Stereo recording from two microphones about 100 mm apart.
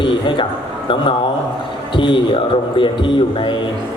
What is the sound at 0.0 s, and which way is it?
Speech, 55° left (ahead or behind).